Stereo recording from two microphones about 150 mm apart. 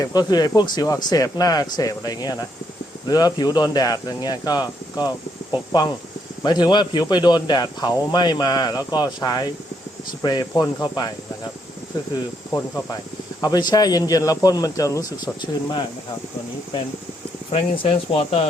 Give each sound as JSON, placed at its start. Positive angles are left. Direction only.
{"t": 0.0, "sound": "speech", "side_deg": 25}
{"t": 13.4, "sound": "speech", "side_deg": 25}
{"t": 17.5, "sound": "speech", "side_deg": 40}